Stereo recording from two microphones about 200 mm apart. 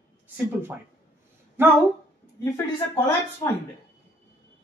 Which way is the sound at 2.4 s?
15° left (ahead or behind).